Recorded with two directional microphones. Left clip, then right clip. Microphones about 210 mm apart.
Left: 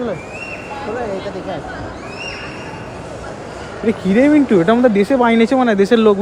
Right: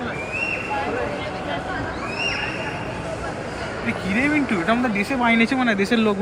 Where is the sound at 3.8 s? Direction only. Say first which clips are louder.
Left 9 dB; 45° left (ahead or behind).